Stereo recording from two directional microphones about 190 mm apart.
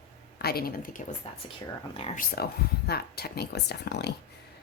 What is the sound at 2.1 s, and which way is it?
Speech, 55° left (ahead or behind).